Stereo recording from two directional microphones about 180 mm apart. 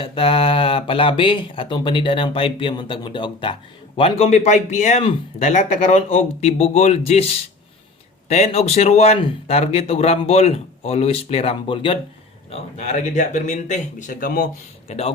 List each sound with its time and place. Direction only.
0.0 s speech: 30° left (ahead or behind)
8.3 s a man's voice: 35° left (ahead or behind)
14.8 s speech: 35° left (ahead or behind)